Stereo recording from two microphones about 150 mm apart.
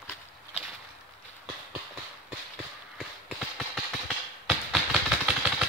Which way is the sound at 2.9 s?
Centre (ahead or behind).